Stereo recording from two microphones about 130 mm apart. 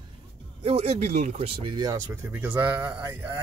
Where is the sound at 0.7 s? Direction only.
55° right (ahead or behind).